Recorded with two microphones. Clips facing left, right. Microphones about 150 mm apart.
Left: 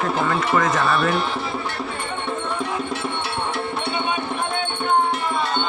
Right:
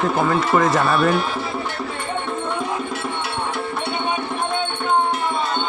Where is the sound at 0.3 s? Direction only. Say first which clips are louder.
Right 3 dB; 30° right (ahead or behind).